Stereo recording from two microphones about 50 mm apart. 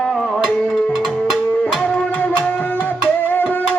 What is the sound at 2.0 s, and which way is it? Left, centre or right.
Music, left.